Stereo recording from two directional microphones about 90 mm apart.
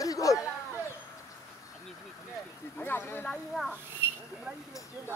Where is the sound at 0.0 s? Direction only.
40° left (ahead or behind).